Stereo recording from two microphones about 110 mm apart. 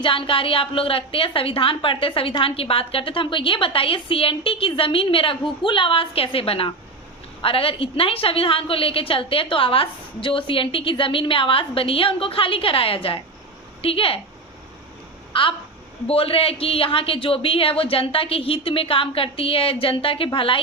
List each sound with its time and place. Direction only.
0.0 s a woman's voice: 50° left (ahead or behind)
15.3 s a woman's voice: 55° left (ahead or behind)